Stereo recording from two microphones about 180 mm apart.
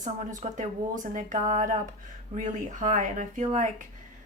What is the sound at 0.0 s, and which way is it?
A woman's voice, 45° right (ahead or behind).